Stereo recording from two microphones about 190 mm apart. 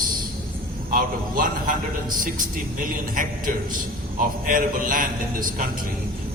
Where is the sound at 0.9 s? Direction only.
45° right (ahead or behind).